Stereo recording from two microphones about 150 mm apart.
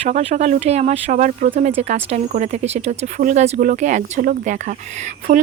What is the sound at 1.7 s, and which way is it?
Speech, 45° right (ahead or behind).